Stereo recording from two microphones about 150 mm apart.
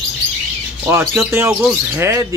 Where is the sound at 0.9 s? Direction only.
20° right (ahead or behind).